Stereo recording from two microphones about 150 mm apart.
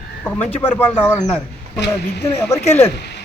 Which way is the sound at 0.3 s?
15° left (ahead or behind).